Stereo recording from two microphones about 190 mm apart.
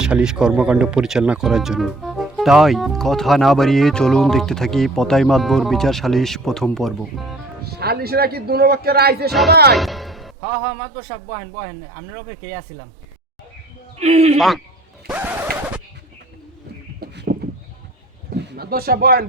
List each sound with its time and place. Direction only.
0.0 s speech: 5° right (ahead or behind)
7.6 s a man's voice: 55° right (ahead or behind)
9.7 s music: centre (ahead or behind)
14.0 s a man's voice: 35° right (ahead or behind)
14.3 s speech: centre (ahead or behind)
15.0 s a sound: 10° right (ahead or behind)
17.0 s a sound: 55° right (ahead or behind)
18.4 s speech: 55° right (ahead or behind)